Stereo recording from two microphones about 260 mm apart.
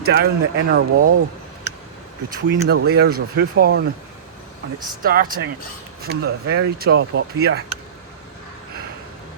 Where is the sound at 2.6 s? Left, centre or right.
Right.